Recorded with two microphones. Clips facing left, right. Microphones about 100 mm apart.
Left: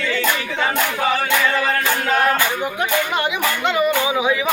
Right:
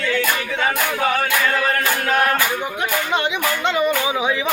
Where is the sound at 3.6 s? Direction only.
15° left (ahead or behind).